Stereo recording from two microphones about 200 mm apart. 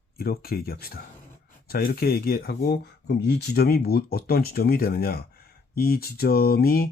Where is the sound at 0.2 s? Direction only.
50° left (ahead or behind).